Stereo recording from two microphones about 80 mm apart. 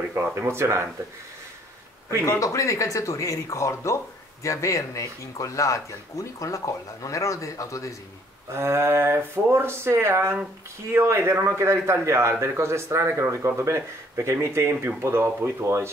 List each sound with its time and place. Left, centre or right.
0.1 s a man's voice: right
2.2 s speech: left
8.5 s a man's voice: right